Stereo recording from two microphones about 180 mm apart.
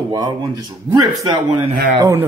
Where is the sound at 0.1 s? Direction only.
20° right (ahead or behind).